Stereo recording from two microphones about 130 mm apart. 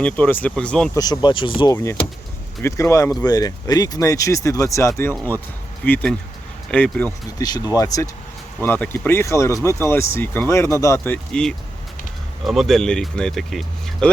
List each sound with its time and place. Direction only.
0.0 s speech: 10° left (ahead or behind)
0.9 s speech: 30° left (ahead or behind)
1.7 s speech: 20° left (ahead or behind)
7.3 s speech: 30° left (ahead or behind)
8.6 s speech: 15° left (ahead or behind)